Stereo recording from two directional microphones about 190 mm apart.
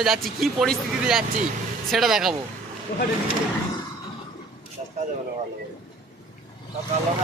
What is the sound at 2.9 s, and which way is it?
Speech, 55° left (ahead or behind).